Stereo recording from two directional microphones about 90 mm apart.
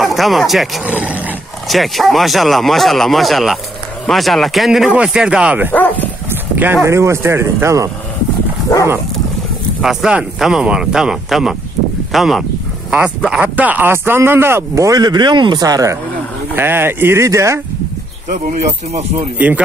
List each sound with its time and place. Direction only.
0.0 s speech: centre (ahead or behind)
0.8 s speech: 15° right (ahead or behind)
1.7 s speech: centre (ahead or behind)
5.7 s dog: 20° left (ahead or behind)
6.5 s speech: 20° right (ahead or behind)
8.7 s dog: 35° left (ahead or behind)
9.8 s speech: 10° right (ahead or behind); by 14.9 s 25° right (ahead or behind)
14.9 s speech: 50° right (ahead or behind)
16.5 s speech: 25° right (ahead or behind)
19.3 s speech: 15° right (ahead or behind)